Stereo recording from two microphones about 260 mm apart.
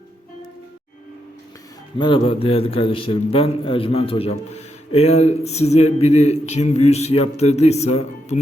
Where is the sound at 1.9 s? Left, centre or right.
Centre.